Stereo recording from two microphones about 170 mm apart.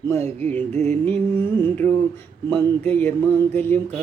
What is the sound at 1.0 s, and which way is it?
Mantra, 10° left (ahead or behind).